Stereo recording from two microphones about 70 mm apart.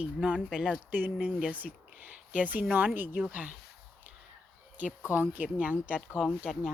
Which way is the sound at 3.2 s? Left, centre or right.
Centre.